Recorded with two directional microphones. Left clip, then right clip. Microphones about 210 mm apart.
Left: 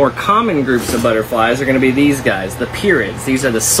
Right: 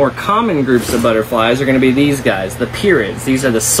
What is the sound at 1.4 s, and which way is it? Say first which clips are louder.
Speech: even; 30° right (ahead or behind).